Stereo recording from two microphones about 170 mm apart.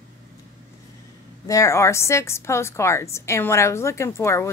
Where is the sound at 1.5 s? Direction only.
15° left (ahead or behind).